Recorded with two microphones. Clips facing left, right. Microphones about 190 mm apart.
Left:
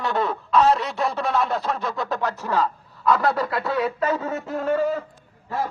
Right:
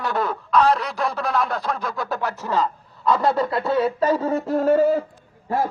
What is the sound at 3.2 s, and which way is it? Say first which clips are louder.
Speech: right 2 dB; 25° right (ahead or behind).